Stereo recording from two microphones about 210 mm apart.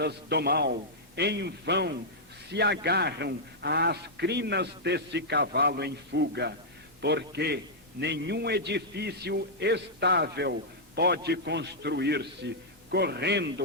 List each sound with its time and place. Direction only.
0.0 s a man's voice: 50° right (ahead or behind)